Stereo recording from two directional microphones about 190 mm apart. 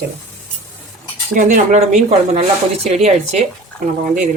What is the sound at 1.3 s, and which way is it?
Speech, 40° right (ahead or behind).